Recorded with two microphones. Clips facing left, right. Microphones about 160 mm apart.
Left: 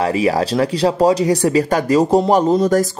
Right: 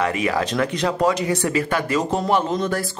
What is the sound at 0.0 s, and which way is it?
Speech, 35° left (ahead or behind).